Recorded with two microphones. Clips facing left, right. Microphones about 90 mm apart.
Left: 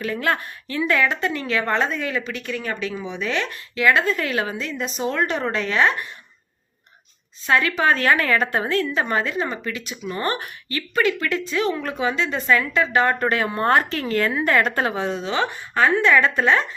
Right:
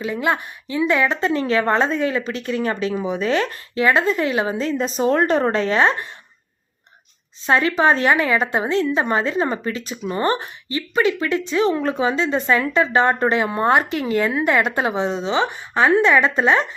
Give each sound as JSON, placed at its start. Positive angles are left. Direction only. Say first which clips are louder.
{"t": 0.0, "sound": "a woman's voice", "louder": "right 2 dB", "side_deg": -20}
{"t": 4.5, "sound": "a woman's voice", "louder": "right 6 dB", "side_deg": -35}
{"t": 7.4, "sound": "a woman's voice", "louder": "right 3 dB", "side_deg": -25}